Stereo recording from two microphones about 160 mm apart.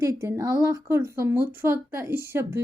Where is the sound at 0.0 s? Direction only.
15° right (ahead or behind).